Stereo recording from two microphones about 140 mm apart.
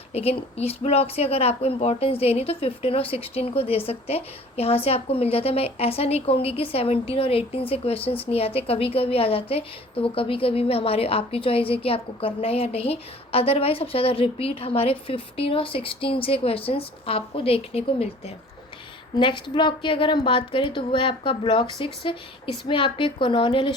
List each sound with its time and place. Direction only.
0.1 s a woman's voice: 45° left (ahead or behind)
19.2 s a woman's voice: 35° left (ahead or behind)